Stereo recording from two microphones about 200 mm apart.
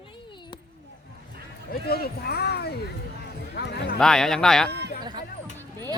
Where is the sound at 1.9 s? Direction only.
50° left (ahead or behind).